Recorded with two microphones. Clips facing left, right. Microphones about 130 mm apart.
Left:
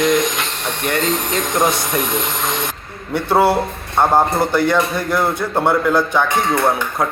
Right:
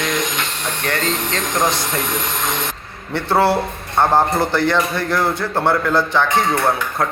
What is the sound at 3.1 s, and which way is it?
A man's voice, 15° left (ahead or behind).